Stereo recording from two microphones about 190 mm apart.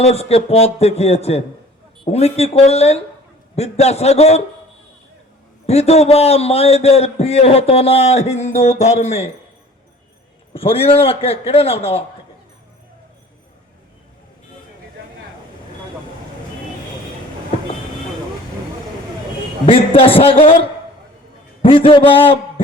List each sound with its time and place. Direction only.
0.0 s a man's voice: 35° left (ahead or behind)
5.6 s a man's voice: 35° left (ahead or behind)
10.5 s a man's voice: 30° left (ahead or behind)
19.6 s a man's voice: 30° left (ahead or behind)